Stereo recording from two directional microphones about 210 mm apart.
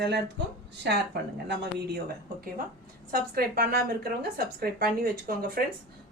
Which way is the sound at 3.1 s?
45° right (ahead or behind).